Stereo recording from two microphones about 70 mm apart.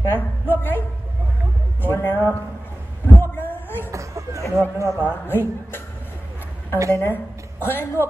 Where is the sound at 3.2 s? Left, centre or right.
Left.